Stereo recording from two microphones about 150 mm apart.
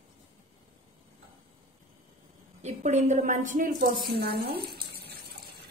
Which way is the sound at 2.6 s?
55° right (ahead or behind).